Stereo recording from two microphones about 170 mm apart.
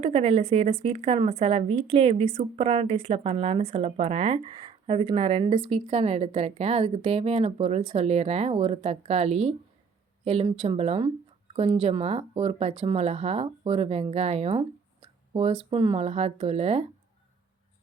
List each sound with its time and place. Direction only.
0.0 s a woman's voice: 35° right (ahead or behind)